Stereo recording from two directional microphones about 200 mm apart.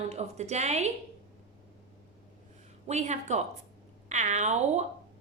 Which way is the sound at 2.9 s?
35° right (ahead or behind).